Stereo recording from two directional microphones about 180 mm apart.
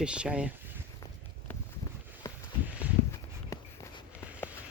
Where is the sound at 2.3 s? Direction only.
15° left (ahead or behind).